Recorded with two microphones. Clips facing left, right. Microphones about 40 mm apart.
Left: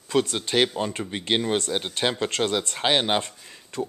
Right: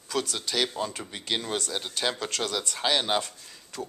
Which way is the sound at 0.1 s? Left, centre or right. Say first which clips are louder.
Left 7 dB; left.